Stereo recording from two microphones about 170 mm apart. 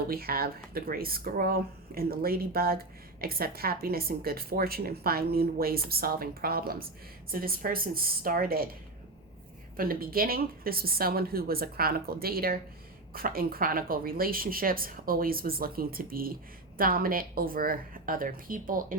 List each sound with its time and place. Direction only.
0.1 s speech: 60° right (ahead or behind)
9.7 s speech: 60° right (ahead or behind)